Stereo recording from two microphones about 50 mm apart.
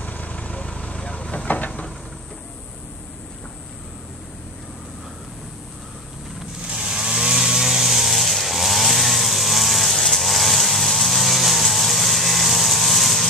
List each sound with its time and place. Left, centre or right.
0.0 s vehicle: left
6.7 s chainsaw: centre